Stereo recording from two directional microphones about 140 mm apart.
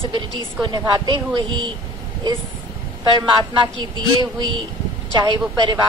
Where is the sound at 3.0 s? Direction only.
30° right (ahead or behind).